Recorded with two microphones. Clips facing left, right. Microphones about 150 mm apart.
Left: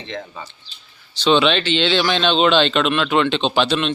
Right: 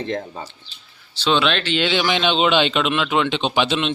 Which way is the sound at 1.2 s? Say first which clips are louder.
Left 3 dB; centre (ahead or behind).